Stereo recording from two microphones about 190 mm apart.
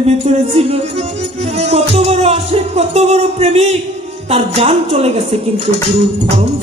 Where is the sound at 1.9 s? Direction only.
35° right (ahead or behind).